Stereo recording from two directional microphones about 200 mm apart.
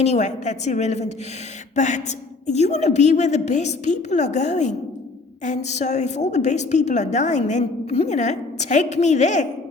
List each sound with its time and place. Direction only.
0.0 s a woman's voice: 35° left (ahead or behind)